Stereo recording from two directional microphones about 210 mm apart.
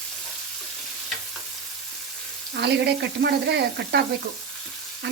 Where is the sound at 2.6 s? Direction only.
50° right (ahead or behind).